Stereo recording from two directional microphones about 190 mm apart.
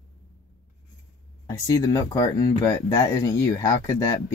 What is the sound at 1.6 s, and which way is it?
Speech, 20° left (ahead or behind).